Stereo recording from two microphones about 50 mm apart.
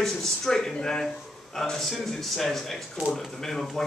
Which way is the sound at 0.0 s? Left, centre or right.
Centre.